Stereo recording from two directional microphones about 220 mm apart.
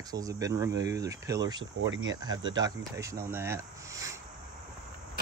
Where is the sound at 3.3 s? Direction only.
10° right (ahead or behind).